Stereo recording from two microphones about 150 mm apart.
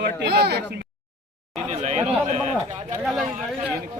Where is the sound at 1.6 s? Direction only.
45° right (ahead or behind).